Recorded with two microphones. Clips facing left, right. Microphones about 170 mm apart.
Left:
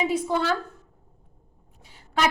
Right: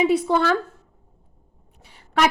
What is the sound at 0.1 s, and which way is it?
Speech, 70° right (ahead or behind).